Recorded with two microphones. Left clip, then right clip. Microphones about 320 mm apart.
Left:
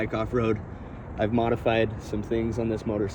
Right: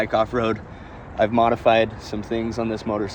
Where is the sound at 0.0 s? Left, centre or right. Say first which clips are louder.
Right 6 dB; centre.